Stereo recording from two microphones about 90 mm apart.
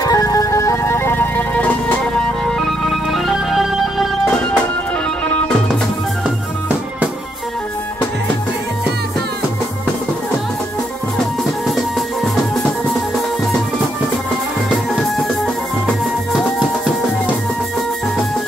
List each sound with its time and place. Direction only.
0.0 s music: 40° left (ahead or behind); by 1.8 s 15° left (ahead or behind)
2.4 s organ: 5° left (ahead or behind)
11.1 s music: centre (ahead or behind)
14.9 s music: 5° left (ahead or behind)